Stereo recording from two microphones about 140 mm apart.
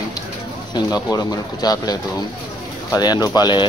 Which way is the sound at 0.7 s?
30° left (ahead or behind).